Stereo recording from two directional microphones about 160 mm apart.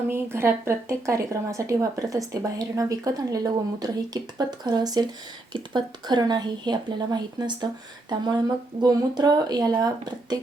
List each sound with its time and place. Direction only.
0.1 s a woman's voice: 15° right (ahead or behind)
8.8 s a woman's voice: 25° right (ahead or behind)